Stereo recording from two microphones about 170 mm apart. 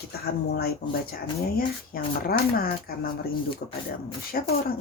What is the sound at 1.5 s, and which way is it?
Speech, 60° left (ahead or behind).